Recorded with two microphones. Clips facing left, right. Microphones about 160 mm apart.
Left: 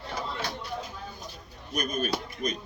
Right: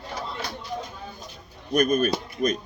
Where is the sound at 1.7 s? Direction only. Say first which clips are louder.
Right 9 dB; 45° right (ahead or behind).